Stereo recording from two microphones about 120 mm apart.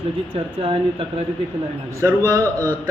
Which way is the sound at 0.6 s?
50° right (ahead or behind).